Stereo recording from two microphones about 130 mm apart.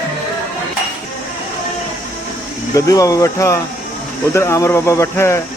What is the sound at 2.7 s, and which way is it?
Speech, 25° left (ahead or behind).